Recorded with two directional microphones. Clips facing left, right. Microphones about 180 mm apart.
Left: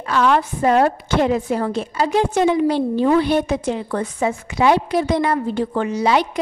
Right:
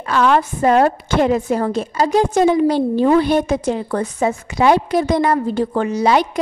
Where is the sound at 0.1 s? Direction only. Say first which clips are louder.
Right 2 dB; 50° right (ahead or behind).